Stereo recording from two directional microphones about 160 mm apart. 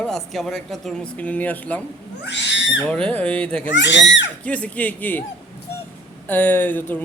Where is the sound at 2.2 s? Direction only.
90° left.